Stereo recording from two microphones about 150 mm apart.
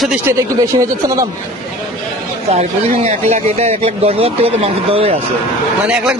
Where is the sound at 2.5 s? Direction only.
50° right (ahead or behind).